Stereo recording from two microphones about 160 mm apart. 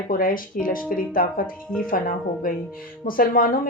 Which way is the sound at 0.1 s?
60° left (ahead or behind).